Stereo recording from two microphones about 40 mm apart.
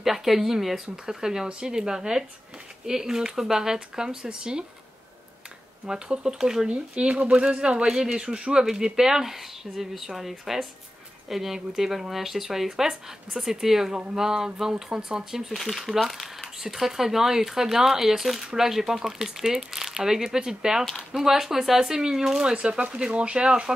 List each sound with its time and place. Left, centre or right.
0.0 s speech: centre
5.9 s speech: centre
6.7 s speech: right
15.5 s speech: centre; by 23.7 s right